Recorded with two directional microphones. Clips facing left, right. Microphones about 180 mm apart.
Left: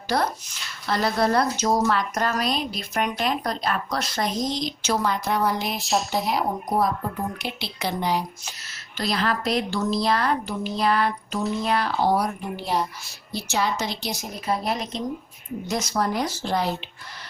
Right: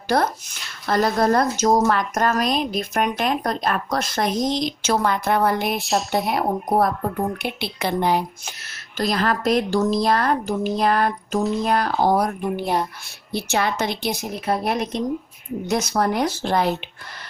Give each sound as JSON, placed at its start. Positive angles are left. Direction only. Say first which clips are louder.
{"t": 0.1, "sound": "speech", "louder": "right 4 dB", "side_deg": -50}
{"t": 5.8, "sound": "speech", "louder": "right 2 dB", "side_deg": 0}
{"t": 6.3, "sound": "speech", "louder": "right 4 dB", "side_deg": -55}